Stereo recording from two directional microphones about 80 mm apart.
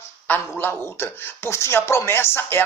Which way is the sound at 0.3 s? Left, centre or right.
Left.